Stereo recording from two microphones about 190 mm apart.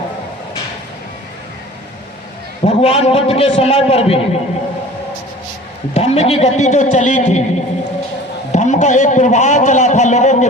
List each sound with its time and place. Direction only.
2.6 s a man's voice: 30° left (ahead or behind)
5.9 s a man's voice: 35° left (ahead or behind)